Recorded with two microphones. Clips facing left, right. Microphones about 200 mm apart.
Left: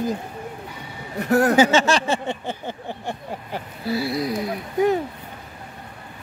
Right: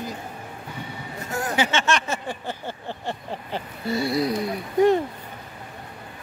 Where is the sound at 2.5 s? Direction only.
15° left (ahead or behind).